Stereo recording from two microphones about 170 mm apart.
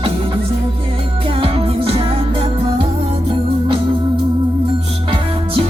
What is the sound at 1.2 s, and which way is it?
Music, 35° right (ahead or behind).